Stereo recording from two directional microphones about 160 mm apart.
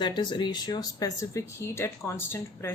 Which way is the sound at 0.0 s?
30° left (ahead or behind).